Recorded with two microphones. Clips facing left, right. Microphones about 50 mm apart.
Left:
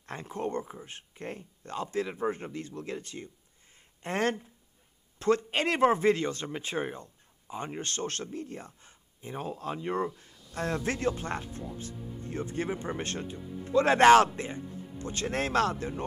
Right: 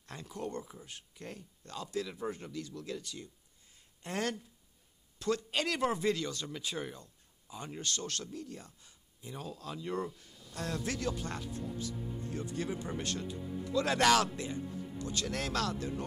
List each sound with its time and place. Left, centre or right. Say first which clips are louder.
0.0 s speech: left 6 dB; left